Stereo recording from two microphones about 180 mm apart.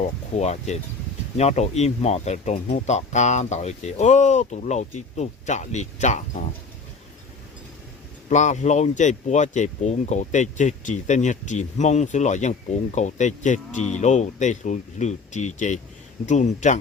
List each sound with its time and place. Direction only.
0.3 s speech: 40° left (ahead or behind)
8.3 s speech: 40° left (ahead or behind)